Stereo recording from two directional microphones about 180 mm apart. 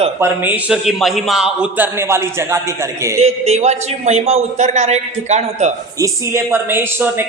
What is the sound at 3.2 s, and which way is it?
A man's voice, 40° right (ahead or behind).